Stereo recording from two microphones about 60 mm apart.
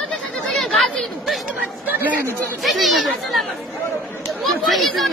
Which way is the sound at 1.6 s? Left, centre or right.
Right.